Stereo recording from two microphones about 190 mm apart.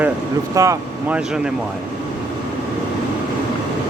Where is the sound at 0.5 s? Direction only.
15° right (ahead or behind).